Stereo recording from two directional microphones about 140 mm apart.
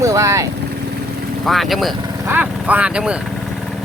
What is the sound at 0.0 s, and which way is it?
Speech, 20° right (ahead or behind).